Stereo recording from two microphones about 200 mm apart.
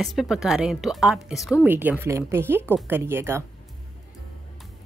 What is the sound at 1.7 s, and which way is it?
Speech, 10° right (ahead or behind).